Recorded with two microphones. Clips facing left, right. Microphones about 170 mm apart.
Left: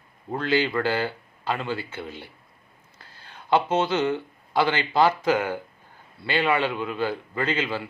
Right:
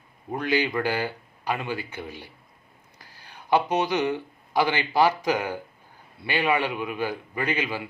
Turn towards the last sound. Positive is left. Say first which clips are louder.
# left 1 dB
turn(degrees=-15)  # may be behind; listen again after turning